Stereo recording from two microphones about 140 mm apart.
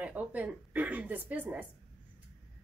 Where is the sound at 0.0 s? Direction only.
10° right (ahead or behind).